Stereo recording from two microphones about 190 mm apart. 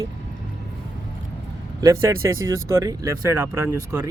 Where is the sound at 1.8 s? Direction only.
15° right (ahead or behind).